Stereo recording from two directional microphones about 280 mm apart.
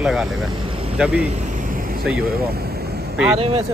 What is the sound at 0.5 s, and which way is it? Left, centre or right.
Vehicle, right.